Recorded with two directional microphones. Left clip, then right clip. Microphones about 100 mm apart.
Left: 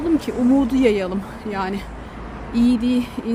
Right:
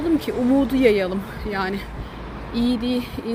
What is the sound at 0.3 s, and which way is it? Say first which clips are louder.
Speech: left 1 dB; 40° left (ahead or behind).